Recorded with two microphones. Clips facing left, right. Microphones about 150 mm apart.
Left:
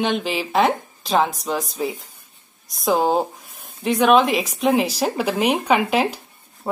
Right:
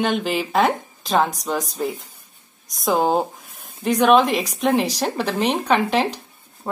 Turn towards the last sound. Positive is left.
turn(degrees=10)  # may be behind; listen again after turning